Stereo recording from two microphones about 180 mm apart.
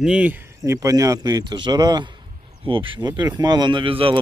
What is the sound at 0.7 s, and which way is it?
A man's voice, 20° right (ahead or behind).